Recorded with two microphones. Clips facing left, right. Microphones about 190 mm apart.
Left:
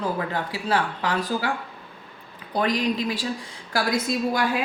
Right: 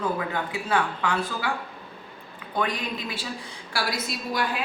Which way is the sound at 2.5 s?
35° left (ahead or behind).